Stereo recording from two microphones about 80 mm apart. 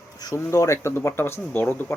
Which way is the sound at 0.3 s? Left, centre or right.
Left.